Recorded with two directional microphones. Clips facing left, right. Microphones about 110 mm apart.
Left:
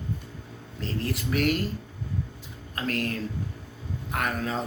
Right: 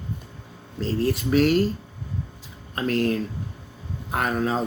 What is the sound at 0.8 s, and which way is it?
Speech, 25° right (ahead or behind).